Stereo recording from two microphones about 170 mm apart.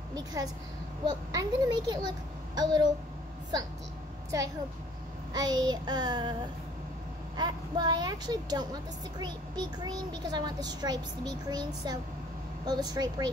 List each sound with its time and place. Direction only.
0.1 s a child's voice: 20° right (ahead or behind)
5.3 s a child's voice: 25° right (ahead or behind)
7.3 s a child's voice: 25° right (ahead or behind)